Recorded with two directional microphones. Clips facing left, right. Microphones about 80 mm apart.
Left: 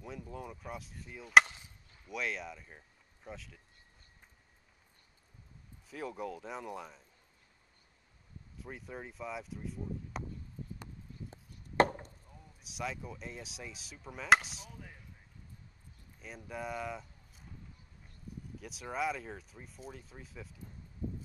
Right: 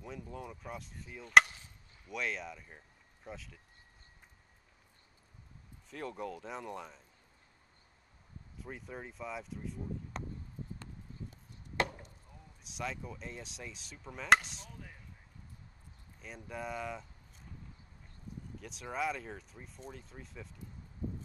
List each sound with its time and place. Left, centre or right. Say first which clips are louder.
0.0 s speech: even; centre
5.9 s speech: left 1 dB; centre
8.5 s speech: even; centre
11.2 s chopping: left 1 dB; left
12.6 s speech: left 1 dB; centre
16.2 s speech: left 1 dB; centre
18.6 s speech: left 1 dB; centre